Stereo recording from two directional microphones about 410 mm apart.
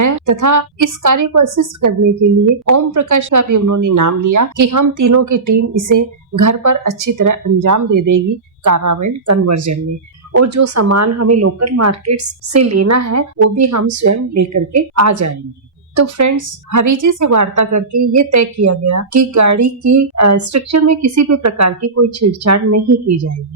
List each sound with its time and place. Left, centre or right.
0.0 s a woman's voice: right